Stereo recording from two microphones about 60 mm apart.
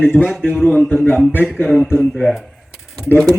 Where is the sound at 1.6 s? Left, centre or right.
Centre.